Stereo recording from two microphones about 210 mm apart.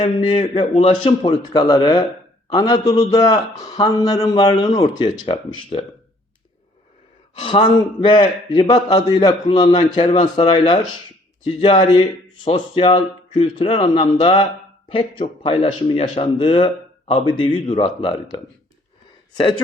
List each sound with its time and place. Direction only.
0.0 s a man's voice: 20° left (ahead or behind)
7.3 s a man's voice: 25° left (ahead or behind)